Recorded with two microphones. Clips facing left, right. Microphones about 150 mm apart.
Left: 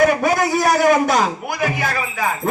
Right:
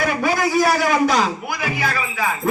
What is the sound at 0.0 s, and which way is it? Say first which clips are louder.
A man's voice: left 4 dB; 50° left (ahead or behind).